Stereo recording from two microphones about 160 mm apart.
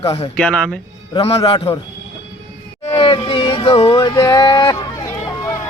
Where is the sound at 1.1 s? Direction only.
40° left (ahead or behind).